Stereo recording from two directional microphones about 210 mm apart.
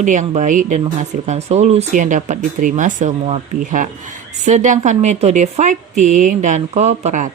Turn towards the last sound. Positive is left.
turn(degrees=-35)  # may be behind; listen again after turning